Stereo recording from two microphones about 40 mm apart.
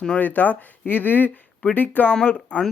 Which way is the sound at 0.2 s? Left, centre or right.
Left.